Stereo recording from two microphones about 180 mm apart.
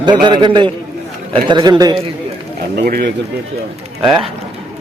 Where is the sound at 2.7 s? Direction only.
60° right (ahead or behind).